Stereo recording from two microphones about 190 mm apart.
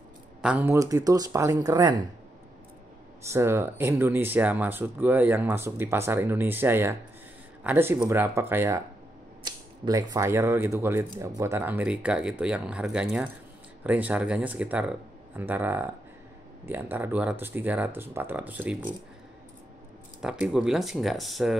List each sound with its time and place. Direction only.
0.4 s speech: 5° right (ahead or behind); by 2.0 s 25° right (ahead or behind)
3.3 s speech: 15° right (ahead or behind)
20.2 s speech: 5° right (ahead or behind)